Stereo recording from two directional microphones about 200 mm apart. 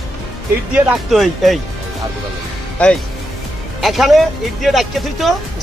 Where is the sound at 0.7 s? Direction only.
5° right (ahead or behind).